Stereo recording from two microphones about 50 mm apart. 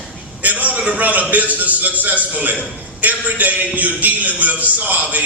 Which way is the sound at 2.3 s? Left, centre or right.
Right.